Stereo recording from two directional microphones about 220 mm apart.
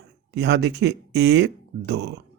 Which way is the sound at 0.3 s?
50° right (ahead or behind).